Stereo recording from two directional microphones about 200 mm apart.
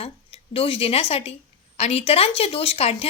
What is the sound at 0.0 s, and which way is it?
A woman's voice, 30° left (ahead or behind).